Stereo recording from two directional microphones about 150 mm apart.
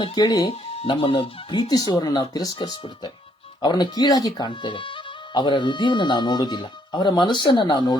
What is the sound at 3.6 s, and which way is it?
Speech, 30° left (ahead or behind).